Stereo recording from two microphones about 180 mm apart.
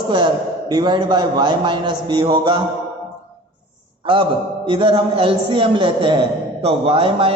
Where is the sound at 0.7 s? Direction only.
25° right (ahead or behind).